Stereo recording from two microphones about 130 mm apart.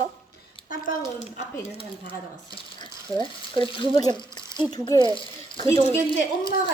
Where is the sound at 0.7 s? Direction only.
80° left; by 2.1 s 55° left (ahead or behind).